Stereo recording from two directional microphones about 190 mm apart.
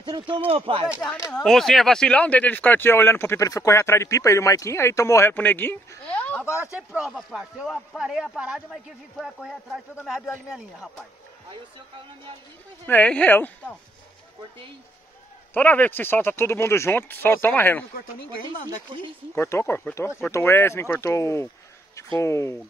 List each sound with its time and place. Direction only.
0.0 s speech: 25° right (ahead or behind)
1.0 s speech: 10° left (ahead or behind)
6.9 s speech: centre (ahead or behind)
10.0 s speech: centre (ahead or behind)
12.8 s speech: 10° left (ahead or behind)
15.5 s speech: 10° left (ahead or behind)
19.3 s speech: 10° left (ahead or behind)